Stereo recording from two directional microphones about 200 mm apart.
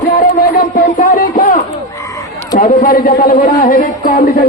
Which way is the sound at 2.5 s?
45° left (ahead or behind).